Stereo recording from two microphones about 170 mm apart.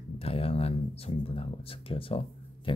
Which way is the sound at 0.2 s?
35° left (ahead or behind).